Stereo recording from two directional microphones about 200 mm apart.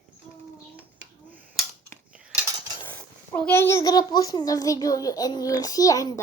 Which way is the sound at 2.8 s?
10° left (ahead or behind).